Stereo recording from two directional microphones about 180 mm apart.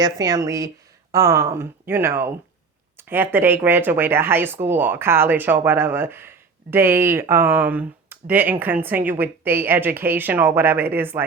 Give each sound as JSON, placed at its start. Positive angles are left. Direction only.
{"t": 0.0, "sound": "speech", "side_deg": -20}